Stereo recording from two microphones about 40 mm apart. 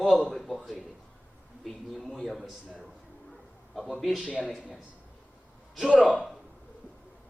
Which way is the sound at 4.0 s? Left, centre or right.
Centre.